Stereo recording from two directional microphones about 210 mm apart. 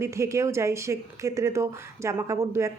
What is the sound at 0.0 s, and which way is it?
Speech, 15° right (ahead or behind).